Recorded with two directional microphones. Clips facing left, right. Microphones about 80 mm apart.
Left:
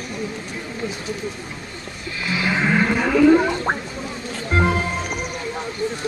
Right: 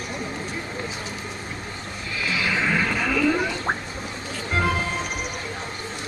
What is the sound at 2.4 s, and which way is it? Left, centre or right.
Music, left.